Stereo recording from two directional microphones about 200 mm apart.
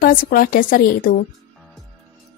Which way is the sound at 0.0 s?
45° left (ahead or behind).